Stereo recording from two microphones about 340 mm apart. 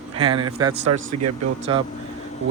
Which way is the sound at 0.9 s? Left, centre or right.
Right.